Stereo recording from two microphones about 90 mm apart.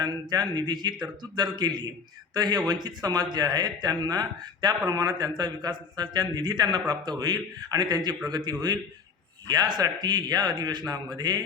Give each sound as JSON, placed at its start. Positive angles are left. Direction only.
{"t": 0.0, "sound": "speech", "side_deg": -50}